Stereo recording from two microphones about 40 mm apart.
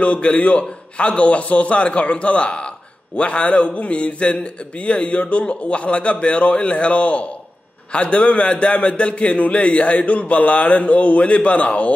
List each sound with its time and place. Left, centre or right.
0.0 s a man's voice: left